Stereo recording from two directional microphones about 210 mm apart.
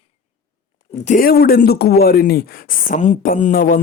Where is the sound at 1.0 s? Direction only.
40° left (ahead or behind).